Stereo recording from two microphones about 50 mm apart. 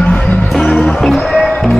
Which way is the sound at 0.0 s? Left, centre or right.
Left.